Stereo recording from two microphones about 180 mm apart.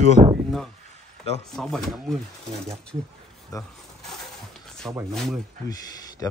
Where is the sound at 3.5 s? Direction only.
20° left (ahead or behind).